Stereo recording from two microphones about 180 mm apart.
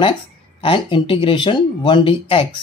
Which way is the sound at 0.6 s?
30° left (ahead or behind).